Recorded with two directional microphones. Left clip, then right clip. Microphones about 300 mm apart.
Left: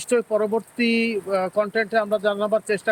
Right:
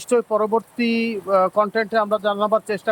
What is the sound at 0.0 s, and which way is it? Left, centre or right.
Speech, centre.